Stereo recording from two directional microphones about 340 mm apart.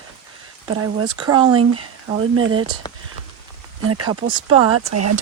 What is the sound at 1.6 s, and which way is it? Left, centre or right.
Speech, right.